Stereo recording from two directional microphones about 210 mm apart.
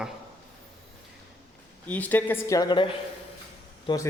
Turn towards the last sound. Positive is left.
turn(degrees=20)  # may be behind; listen again after turning